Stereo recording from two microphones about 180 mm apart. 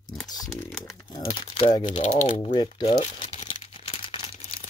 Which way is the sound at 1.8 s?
40° left (ahead or behind).